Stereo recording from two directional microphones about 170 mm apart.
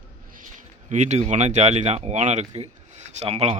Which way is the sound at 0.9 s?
45° right (ahead or behind).